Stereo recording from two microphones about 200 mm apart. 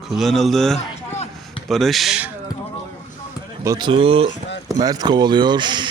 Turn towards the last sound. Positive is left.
turn(degrees=-20)  # may be behind; listen again after turning